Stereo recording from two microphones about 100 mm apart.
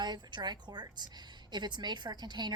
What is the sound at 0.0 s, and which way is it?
A woman's voice, 45° right (ahead or behind).